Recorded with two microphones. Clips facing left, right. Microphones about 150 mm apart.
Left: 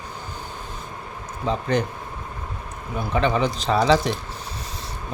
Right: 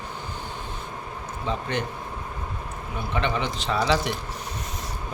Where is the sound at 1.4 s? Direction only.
40° left (ahead or behind).